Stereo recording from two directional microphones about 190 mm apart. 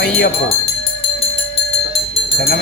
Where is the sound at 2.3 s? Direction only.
55° left (ahead or behind).